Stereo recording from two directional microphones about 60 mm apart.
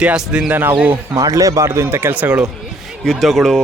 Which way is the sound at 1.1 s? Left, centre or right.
Right.